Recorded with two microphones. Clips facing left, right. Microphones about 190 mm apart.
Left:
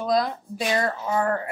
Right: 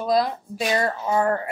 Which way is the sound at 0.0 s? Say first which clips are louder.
Right 2 dB; 10° right (ahead or behind).